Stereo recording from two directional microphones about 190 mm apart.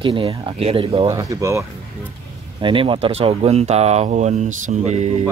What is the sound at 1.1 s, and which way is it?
Speech, 15° right (ahead or behind).